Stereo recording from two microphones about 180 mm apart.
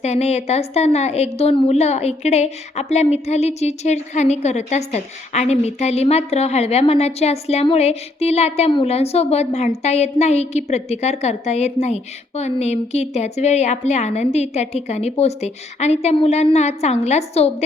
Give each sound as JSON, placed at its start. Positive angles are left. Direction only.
{"t": 0.0, "sound": "a woman's voice", "side_deg": 35}